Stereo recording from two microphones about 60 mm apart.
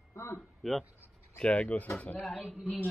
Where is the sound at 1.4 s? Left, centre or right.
Left.